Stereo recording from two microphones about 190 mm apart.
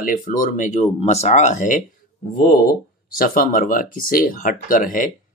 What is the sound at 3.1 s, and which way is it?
Speech, 50° left (ahead or behind).